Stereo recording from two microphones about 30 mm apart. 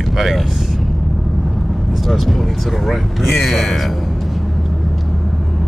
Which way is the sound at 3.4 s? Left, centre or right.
Centre.